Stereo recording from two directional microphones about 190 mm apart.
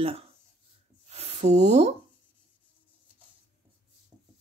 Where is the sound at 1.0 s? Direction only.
35° right (ahead or behind).